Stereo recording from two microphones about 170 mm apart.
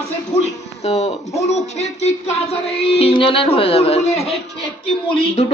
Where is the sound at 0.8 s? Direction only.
40° left (ahead or behind).